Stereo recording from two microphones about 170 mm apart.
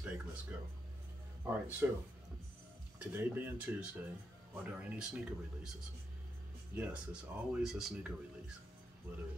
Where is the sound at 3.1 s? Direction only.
10° right (ahead or behind).